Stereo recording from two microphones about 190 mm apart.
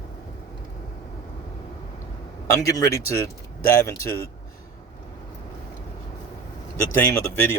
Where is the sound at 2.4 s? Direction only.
15° left (ahead or behind).